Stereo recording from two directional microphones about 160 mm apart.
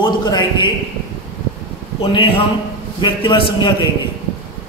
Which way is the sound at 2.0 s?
35° left (ahead or behind).